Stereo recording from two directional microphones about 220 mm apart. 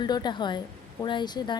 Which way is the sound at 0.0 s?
20° left (ahead or behind).